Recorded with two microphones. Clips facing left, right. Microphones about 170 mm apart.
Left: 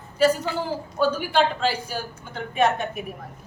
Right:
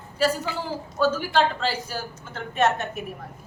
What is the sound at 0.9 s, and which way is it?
Speech, 15° left (ahead or behind).